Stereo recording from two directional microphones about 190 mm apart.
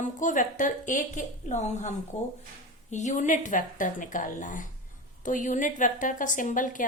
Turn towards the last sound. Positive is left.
turn(degrees=45)  # may be behind; listen again after turning